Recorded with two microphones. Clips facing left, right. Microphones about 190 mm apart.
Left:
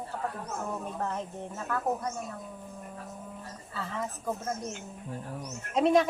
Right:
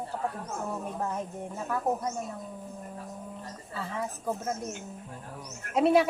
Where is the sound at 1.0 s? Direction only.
10° right (ahead or behind).